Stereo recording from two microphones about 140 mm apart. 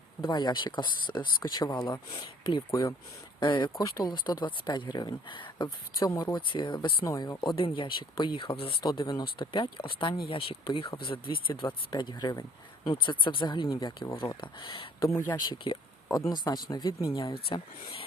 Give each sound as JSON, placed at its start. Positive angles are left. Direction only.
{"t": 0.2, "sound": "speech", "side_deg": 30}
{"t": 7.0, "sound": "speech", "side_deg": 25}
{"t": 7.4, "sound": "speech", "side_deg": 40}
{"t": 14.4, "sound": "speech", "side_deg": 35}
{"t": 15.0, "sound": "speech", "side_deg": 20}
{"t": 15.4, "sound": "speech", "side_deg": 35}
{"t": 17.5, "sound": "speech", "side_deg": 35}